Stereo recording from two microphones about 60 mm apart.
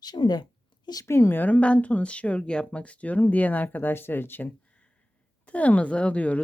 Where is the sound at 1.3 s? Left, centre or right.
Left.